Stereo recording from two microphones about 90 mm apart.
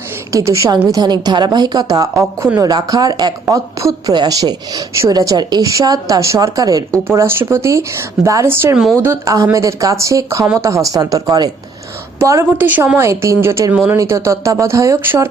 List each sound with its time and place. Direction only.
0.3 s speech: 35° right (ahead or behind)
0.9 s a woman's voice: 50° right (ahead or behind)
7.1 s speech: 25° right (ahead or behind)
8.4 s speech: 25° right (ahead or behind)
9.0 s speech: 40° right (ahead or behind)
12.5 s speech: 20° right (ahead or behind)
13.0 s speech: 30° right (ahead or behind)